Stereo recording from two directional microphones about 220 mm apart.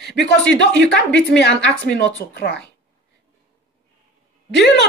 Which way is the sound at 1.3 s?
50° left (ahead or behind).